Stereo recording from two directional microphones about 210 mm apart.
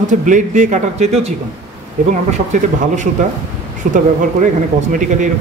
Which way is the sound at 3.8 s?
40° right (ahead or behind).